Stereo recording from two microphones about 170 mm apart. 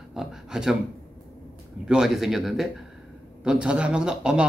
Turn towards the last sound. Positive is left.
turn(degrees=-5)  # may be behind; listen again after turning